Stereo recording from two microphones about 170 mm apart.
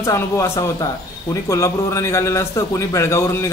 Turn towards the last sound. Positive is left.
turn(degrees=15)  # may be behind; listen again after turning